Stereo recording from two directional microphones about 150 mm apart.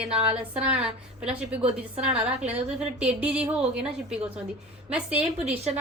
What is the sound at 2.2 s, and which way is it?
A woman's voice, 5° right (ahead or behind).